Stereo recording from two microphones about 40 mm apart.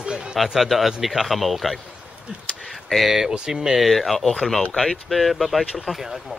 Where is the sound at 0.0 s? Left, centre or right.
Centre.